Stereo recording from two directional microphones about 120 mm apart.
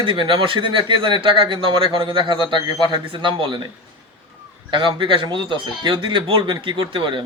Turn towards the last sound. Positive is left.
turn(degrees=-45)  # may be behind; listen again after turning